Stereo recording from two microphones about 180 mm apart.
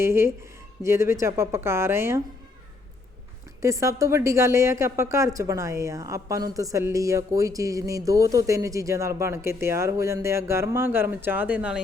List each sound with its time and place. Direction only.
0.0 s a woman's voice: 15° right (ahead or behind)
3.6 s a woman's voice: 15° right (ahead or behind)